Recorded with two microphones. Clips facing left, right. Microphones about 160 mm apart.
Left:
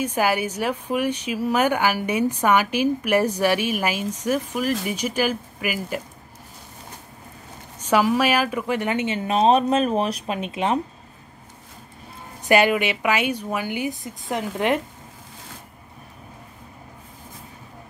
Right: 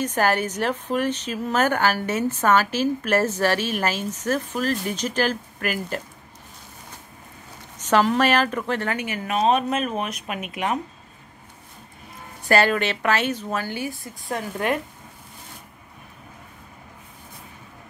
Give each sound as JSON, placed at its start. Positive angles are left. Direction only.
{"t": 0.0, "sound": "a woman's voice", "side_deg": 10}
{"t": 7.8, "sound": "a woman's voice", "side_deg": 10}
{"t": 12.4, "sound": "a woman's voice", "side_deg": 15}